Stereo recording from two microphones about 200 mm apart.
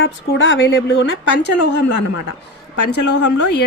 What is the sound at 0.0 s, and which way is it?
Speech, 65° left (ahead or behind).